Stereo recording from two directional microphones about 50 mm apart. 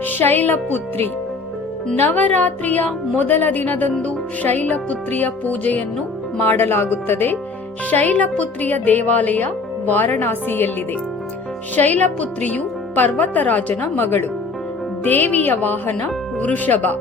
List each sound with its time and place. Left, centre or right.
0.0 s a woman's voice: left
6.4 s speech: left
7.9 s a woman's voice: left
11.8 s a woman's voice: left